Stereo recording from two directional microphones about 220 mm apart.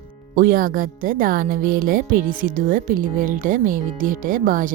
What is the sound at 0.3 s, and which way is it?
Speech, 40° right (ahead or behind).